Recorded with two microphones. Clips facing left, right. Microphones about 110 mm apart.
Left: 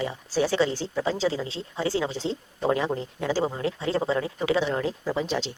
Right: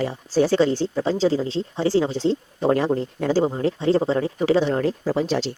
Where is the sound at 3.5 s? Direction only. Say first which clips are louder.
Right 7 dB; 30° right (ahead or behind).